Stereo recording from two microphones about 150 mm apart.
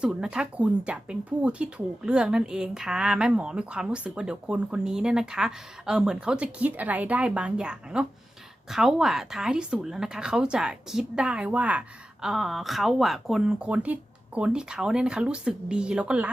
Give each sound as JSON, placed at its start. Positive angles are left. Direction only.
{"t": 0.0, "sound": "a woman's voice", "side_deg": -5}